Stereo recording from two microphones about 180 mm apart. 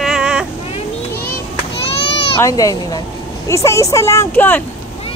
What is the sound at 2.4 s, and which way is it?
A woman's voice, 20° left (ahead or behind).